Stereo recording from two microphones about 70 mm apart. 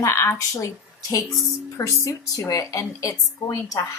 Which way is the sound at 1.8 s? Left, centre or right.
Left.